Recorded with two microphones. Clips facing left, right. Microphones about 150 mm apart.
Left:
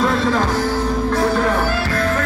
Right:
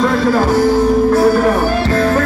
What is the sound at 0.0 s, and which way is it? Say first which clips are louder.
Music: right 4 dB; centre (ahead or behind).